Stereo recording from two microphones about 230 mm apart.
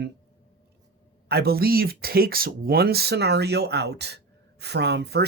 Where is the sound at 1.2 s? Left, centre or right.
Right.